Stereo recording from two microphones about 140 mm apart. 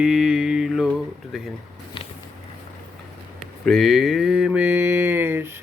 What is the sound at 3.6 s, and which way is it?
Mantra, centre (ahead or behind).